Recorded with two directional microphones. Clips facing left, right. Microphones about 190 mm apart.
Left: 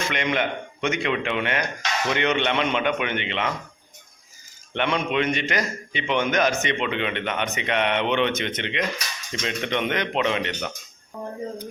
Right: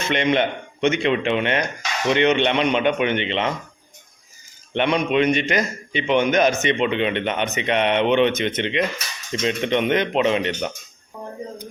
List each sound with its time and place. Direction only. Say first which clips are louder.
0.0 s a man's voice: right 5 dB; 25° right (ahead or behind)
4.7 s a man's voice: right 4 dB; 15° right (ahead or behind)